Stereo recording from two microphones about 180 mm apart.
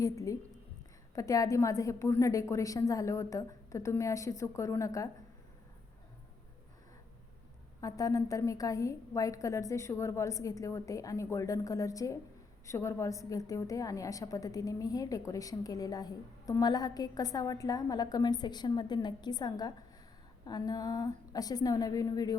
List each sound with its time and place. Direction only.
0.0 s a woman's voice: 20° left (ahead or behind)
7.8 s a woman's voice: 20° left (ahead or behind)